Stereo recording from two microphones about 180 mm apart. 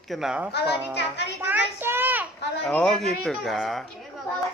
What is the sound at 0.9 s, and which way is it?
Speech, 65° left (ahead or behind).